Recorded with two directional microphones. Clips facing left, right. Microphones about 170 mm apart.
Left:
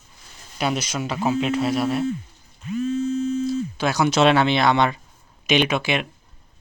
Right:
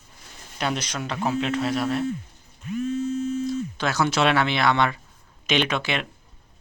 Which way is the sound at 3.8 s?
15° left (ahead or behind).